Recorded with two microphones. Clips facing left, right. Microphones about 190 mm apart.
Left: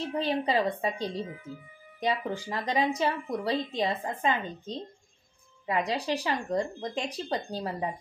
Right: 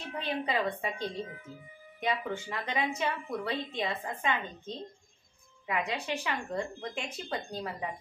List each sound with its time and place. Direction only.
0.2 s speech: 35° left (ahead or behind)